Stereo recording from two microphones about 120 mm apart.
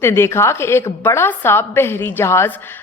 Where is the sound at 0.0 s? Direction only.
20° left (ahead or behind).